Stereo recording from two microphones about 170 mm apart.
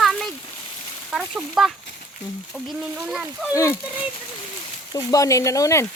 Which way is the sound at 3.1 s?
5° right (ahead or behind).